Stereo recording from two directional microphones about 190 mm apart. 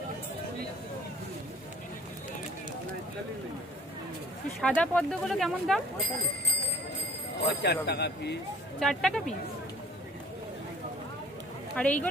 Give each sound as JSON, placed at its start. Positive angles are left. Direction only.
{"t": 4.6, "sound": "speech", "side_deg": 5}
{"t": 7.6, "sound": "speech", "side_deg": 60}
{"t": 8.8, "sound": "speech", "side_deg": 0}
{"t": 11.8, "sound": "a woman's voice", "side_deg": 10}